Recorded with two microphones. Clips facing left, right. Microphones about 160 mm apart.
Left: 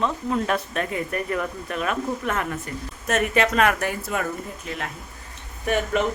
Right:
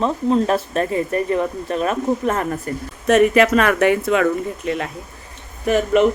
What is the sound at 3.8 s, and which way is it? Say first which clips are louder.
Speech: right 11 dB; 65° right (ahead or behind).